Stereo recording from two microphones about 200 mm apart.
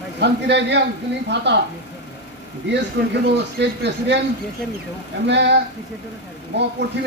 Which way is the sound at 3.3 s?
55° right (ahead or behind).